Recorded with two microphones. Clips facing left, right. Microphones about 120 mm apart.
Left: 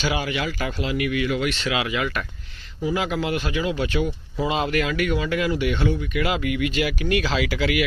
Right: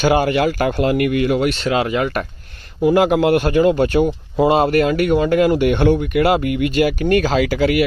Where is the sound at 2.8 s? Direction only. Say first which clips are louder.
Right 11 dB; 60° right (ahead or behind).